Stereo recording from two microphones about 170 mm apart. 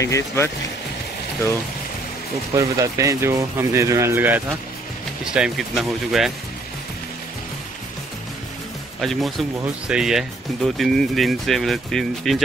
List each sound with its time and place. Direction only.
0.0 s speech: 15° left (ahead or behind)
2.5 s speech: 20° right (ahead or behind); by 6.3 s centre (ahead or behind)
9.0 s speech: centre (ahead or behind)